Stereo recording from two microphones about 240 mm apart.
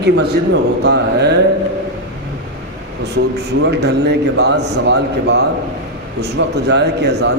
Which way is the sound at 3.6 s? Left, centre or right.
Right.